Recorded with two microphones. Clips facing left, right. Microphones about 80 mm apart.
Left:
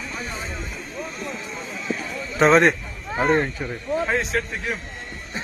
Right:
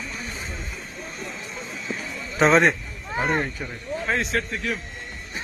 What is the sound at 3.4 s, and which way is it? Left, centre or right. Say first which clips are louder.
Speech: left 4 dB; centre.